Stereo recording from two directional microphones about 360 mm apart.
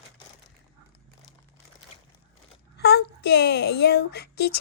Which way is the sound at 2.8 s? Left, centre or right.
Left.